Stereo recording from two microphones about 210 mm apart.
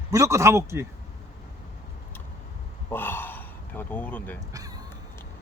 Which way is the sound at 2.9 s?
10° left (ahead or behind).